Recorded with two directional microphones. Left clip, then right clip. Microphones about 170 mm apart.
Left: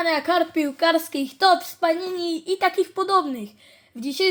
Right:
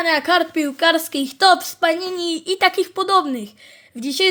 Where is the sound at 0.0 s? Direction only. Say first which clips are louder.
Right 4 dB; 20° right (ahead or behind).